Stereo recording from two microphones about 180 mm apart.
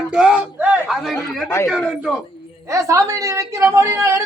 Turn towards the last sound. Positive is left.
turn(degrees=-15)  # may be behind; listen again after turning